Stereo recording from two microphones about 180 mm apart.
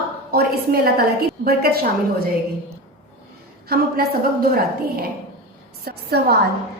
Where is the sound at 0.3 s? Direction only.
60° right (ahead or behind).